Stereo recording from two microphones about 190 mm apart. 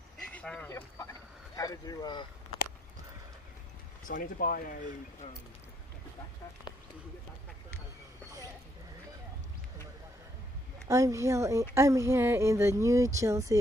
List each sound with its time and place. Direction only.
0.3 s speech: 5° left (ahead or behind)
4.1 s speech: 50° left (ahead or behind)
10.9 s speech: 15° right (ahead or behind)